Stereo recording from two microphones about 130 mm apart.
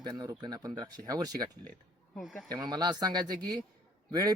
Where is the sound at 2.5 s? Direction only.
30° right (ahead or behind).